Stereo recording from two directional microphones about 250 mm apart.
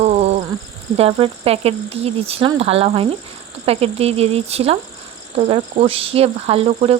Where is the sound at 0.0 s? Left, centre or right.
Right.